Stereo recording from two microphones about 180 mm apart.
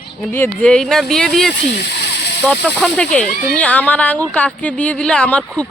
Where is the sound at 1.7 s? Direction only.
65° left (ahead or behind).